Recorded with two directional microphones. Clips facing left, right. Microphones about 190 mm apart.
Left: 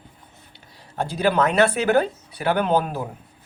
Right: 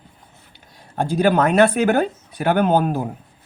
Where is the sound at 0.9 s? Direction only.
50° right (ahead or behind).